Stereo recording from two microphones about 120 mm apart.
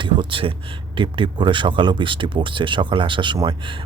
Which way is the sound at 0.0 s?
45° right (ahead or behind).